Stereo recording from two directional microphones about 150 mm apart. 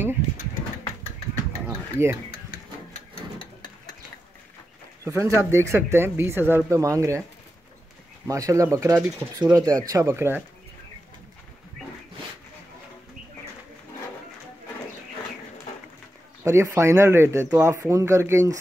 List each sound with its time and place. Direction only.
1.7 s a sound: 15° right (ahead or behind)
5.0 s speech: 20° right (ahead or behind)
8.3 s speech: 20° right (ahead or behind)
16.4 s speech: 20° right (ahead or behind)